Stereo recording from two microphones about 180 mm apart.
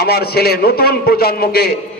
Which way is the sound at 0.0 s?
60° left (ahead or behind).